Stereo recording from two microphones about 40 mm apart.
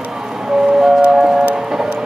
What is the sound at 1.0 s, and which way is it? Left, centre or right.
Music, right.